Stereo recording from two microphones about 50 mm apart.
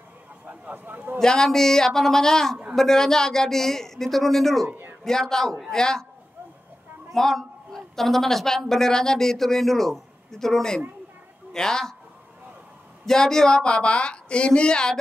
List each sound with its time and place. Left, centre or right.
0.5 s speech: right
1.2 s a woman's voice: centre
4.6 s a sound: right
5.0 s a woman's voice: centre
7.2 s a man's voice: centre
13.0 s a woman's voice: centre